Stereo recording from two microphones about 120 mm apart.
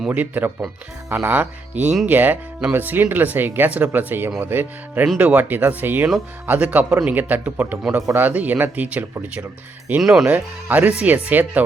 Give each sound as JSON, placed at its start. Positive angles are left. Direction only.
{"t": 0.1, "sound": "speech", "side_deg": -15}
{"t": 10.0, "sound": "speech", "side_deg": 0}
{"t": 10.2, "sound": "speech", "side_deg": -15}